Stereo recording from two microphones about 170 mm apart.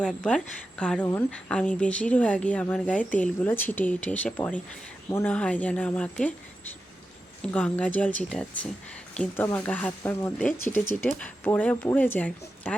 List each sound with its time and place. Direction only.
0.0 s a woman's voice: 5° left (ahead or behind)